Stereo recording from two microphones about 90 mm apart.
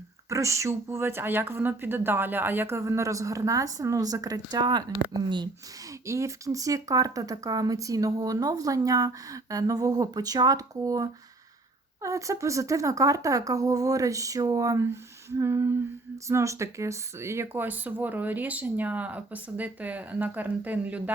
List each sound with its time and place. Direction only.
0.3 s speech: 35° right (ahead or behind); by 5.5 s 55° right (ahead or behind)
6.1 s speech: 35° right (ahead or behind); by 21.0 s 15° right (ahead or behind)